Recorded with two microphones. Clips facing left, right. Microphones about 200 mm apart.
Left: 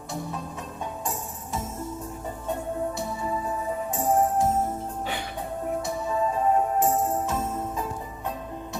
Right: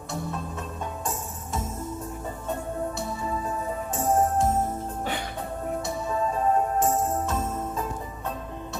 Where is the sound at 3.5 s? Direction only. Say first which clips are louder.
Left 1 dB; 15° left (ahead or behind).